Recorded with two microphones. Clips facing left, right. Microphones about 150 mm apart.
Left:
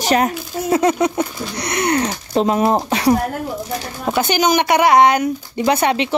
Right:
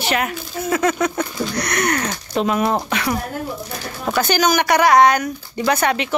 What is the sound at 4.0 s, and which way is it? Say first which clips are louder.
Speech: left 1 dB; 20° left (ahead or behind).